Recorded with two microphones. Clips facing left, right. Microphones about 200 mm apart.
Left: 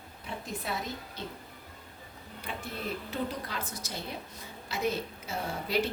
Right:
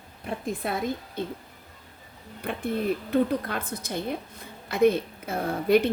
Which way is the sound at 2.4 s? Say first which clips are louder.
Right 11 dB; 55° right (ahead or behind).